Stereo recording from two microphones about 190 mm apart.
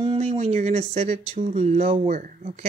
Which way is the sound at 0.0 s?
30° right (ahead or behind).